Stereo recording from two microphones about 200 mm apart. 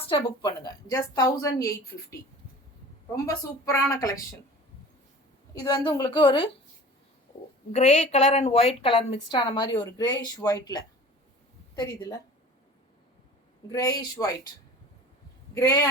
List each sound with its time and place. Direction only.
0.1 s a woman's voice: 25° left (ahead or behind)
3.2 s speech: 15° left (ahead or behind)
5.5 s a woman's voice: 20° left (ahead or behind)
7.7 s a woman's voice: 35° left (ahead or behind)
13.7 s a woman's voice: 20° left (ahead or behind)
15.5 s speech: 15° left (ahead or behind)